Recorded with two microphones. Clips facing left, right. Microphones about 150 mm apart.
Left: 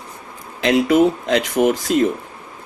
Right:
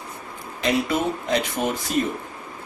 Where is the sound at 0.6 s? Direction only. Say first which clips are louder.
Left 8 dB; 90° left.